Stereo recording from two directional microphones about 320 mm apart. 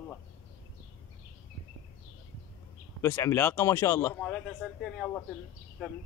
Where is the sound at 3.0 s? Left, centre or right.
Centre.